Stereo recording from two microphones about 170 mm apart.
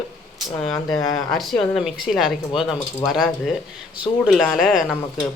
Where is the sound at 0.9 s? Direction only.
20° left (ahead or behind).